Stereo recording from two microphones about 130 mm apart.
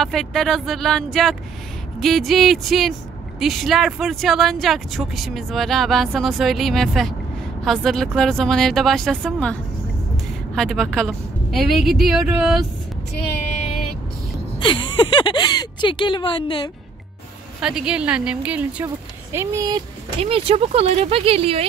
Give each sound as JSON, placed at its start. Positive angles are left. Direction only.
{"t": 0.0, "sound": "speech", "side_deg": 0}
{"t": 14.6, "sound": "speech", "side_deg": 40}
{"t": 17.6, "sound": "speech", "side_deg": -5}
{"t": 19.3, "sound": "speech", "side_deg": -20}
{"t": 20.2, "sound": "speech", "side_deg": -45}